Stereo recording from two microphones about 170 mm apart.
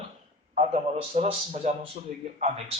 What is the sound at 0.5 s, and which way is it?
A man's voice, 40° right (ahead or behind).